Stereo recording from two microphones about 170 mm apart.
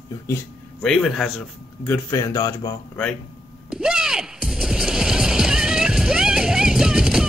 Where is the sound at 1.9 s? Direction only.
20° left (ahead or behind).